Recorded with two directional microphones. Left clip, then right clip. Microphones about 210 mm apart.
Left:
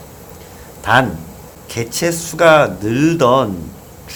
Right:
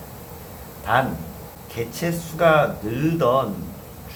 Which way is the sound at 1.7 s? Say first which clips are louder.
Left 8 dB; 55° left (ahead or behind).